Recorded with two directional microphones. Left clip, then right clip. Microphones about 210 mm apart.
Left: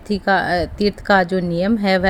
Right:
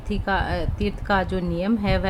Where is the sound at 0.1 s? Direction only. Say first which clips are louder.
Left 8 dB; 20° left (ahead or behind).